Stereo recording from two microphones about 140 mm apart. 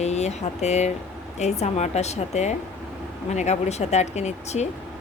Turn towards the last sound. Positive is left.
turn(degrees=50)  # may be behind; listen again after turning